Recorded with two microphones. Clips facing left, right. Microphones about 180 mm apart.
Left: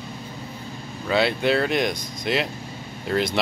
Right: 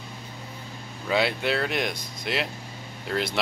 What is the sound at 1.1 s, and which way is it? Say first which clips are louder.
Speech: left 4 dB; 5° right (ahead or behind).